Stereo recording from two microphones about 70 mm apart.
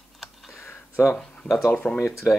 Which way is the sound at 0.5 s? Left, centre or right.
Left.